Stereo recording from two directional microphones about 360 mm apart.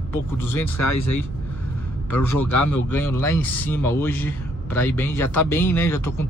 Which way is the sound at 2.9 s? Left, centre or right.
Centre.